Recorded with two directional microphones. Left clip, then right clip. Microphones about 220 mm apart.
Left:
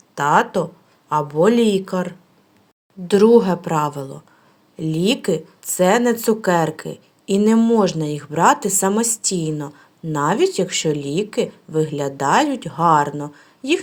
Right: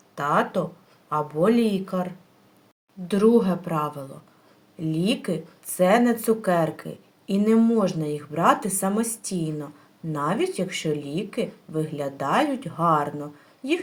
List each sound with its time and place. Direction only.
0.1 s speech: 40° left (ahead or behind)